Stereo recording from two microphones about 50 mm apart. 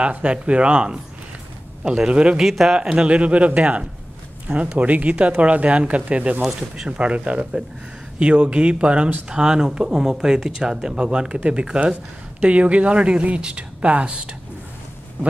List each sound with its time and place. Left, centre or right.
0.0 s a woman's voice: right
2.4 s speech: centre
2.8 s a woman's voice: centre
6.4 s speech: centre
7.0 s a woman's voice: right